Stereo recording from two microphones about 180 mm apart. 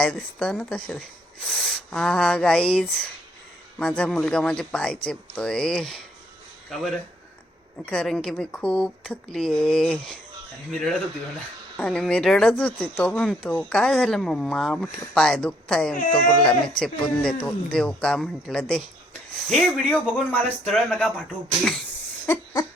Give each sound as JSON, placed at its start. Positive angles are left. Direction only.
{"t": 0.0, "sound": "speech", "side_deg": 5}